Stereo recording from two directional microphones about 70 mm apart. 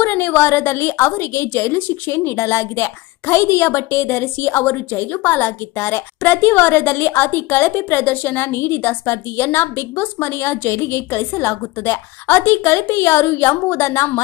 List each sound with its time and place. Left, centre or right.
0.0 s a woman's voice: left